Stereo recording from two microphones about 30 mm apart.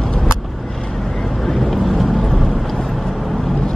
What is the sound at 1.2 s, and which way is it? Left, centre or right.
Vehicle, centre.